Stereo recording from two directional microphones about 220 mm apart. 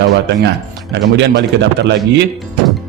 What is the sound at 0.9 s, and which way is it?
Speech, 50° right (ahead or behind).